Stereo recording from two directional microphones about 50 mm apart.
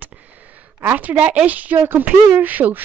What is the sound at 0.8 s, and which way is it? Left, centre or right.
Speech, right.